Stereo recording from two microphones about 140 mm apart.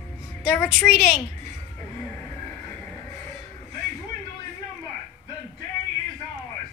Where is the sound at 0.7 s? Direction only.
Centre (ahead or behind).